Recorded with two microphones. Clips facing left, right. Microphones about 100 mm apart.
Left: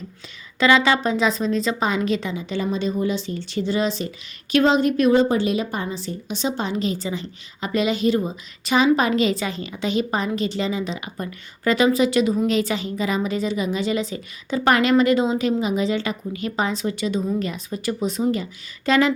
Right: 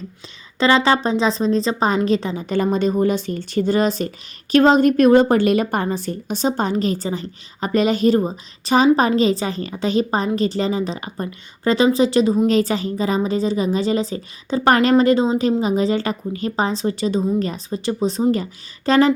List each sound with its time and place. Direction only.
0.6 s a woman's voice: 35° right (ahead or behind)